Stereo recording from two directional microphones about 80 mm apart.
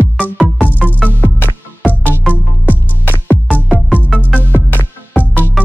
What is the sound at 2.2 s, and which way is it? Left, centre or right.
Music, right.